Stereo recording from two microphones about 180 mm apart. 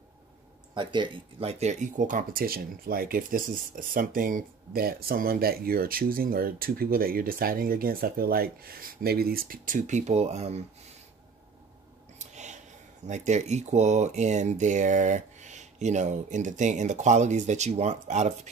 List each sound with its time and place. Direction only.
0.7 s speech: 25° right (ahead or behind)
12.2 s speech: 40° right (ahead or behind)